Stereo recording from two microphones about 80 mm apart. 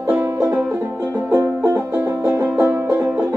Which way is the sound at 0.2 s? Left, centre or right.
Right.